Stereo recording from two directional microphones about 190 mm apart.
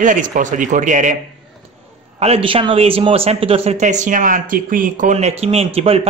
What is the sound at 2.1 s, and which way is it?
A man's voice, 35° right (ahead or behind).